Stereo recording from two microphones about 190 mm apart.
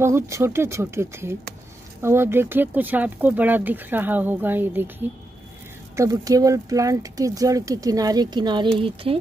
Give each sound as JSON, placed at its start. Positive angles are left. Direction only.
{"t": 0.0, "sound": "speech", "side_deg": -15}